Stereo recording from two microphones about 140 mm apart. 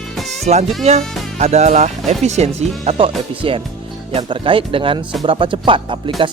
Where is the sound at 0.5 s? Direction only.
55° right (ahead or behind).